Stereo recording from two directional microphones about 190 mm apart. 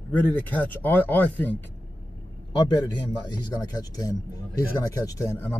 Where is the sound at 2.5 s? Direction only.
25° left (ahead or behind).